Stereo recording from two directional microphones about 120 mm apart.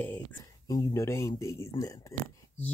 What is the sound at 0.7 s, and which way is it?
Speech, 30° left (ahead or behind).